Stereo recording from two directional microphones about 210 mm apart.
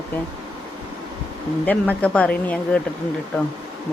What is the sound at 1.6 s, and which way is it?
Speech, 5° left (ahead or behind).